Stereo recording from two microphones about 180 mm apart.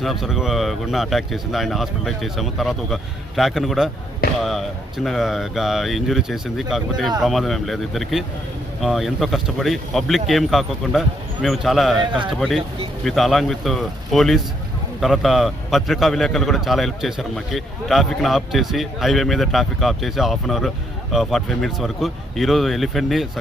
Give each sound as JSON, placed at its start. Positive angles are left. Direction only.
{"t": 0.0, "sound": "a man's voice", "side_deg": 0}
{"t": 4.2, "sound": "a sound", "side_deg": 55}
{"t": 5.0, "sound": "a man's voice", "side_deg": 0}